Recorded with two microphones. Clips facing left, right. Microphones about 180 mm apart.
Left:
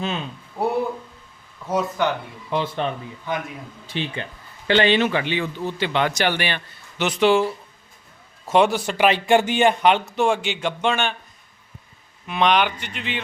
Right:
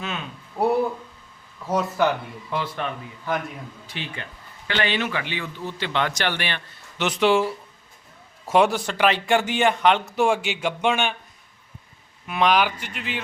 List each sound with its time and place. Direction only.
0.6 s speech: centre (ahead or behind)
2.5 s speech: 25° left (ahead or behind)
3.8 s speech: 25° left (ahead or behind); by 8.8 s 5° right (ahead or behind)
8.9 s speech: 15° left (ahead or behind)
10.2 s a man's voice: 10° right (ahead or behind)
12.3 s speech: 5° right (ahead or behind)